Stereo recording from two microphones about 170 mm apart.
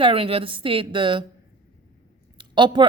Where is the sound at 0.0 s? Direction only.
30° right (ahead or behind).